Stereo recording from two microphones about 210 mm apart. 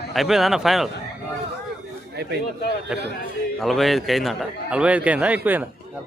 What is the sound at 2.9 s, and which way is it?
A man's voice, 5° right (ahead or behind).